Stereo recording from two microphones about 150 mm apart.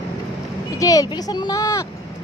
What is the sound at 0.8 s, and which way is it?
Speech, 25° left (ahead or behind).